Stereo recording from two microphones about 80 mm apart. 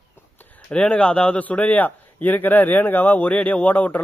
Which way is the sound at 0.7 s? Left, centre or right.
Centre.